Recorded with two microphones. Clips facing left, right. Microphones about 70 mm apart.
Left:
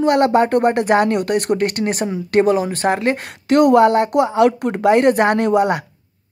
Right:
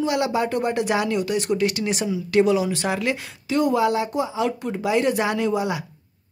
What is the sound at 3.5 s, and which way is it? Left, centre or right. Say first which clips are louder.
Speech: left 8 dB; left.